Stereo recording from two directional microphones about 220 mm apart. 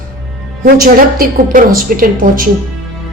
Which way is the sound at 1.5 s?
40° right (ahead or behind).